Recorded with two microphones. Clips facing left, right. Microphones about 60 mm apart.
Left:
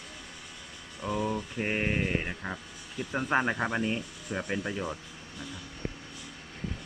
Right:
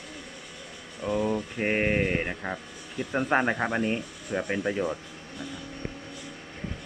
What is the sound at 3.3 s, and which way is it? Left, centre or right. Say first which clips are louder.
Speech: right 2 dB; centre.